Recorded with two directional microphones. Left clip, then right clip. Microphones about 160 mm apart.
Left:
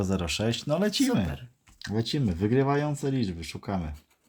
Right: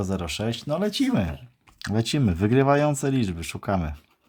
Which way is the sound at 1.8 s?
35° right (ahead or behind).